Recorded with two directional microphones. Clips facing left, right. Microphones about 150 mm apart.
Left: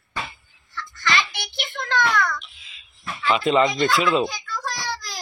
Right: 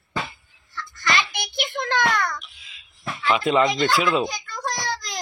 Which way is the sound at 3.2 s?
Centre (ahead or behind).